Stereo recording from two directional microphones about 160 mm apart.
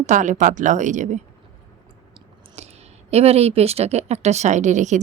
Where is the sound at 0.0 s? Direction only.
50° right (ahead or behind).